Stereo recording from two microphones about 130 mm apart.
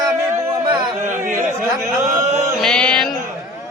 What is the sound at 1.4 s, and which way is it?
Speech, 20° right (ahead or behind).